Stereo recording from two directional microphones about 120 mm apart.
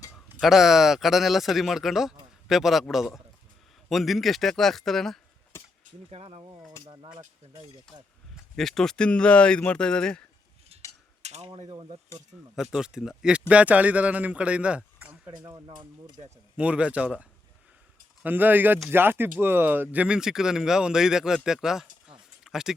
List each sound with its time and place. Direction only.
0.1 s speech: centre (ahead or behind)
5.5 s a sound: 20° left (ahead or behind)
6.1 s speech: 55° right (ahead or behind)
6.8 s speech: 40° right (ahead or behind)
8.5 s speech: 5° left (ahead or behind)
11.2 s mechanisms: 65° right (ahead or behind)
12.1 s speech: 25° left (ahead or behind)
12.7 s a man's voice: 5° right (ahead or behind)
16.6 s a man's voice: 10° right (ahead or behind)